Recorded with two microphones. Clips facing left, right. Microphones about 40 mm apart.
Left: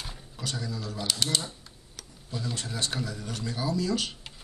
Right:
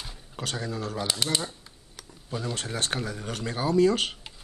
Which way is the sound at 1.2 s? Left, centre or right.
Right.